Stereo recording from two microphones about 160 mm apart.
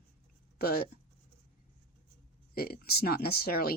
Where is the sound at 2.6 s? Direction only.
70° left (ahead or behind).